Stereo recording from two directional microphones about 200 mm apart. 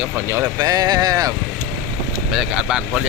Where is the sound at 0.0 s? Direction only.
10° right (ahead or behind).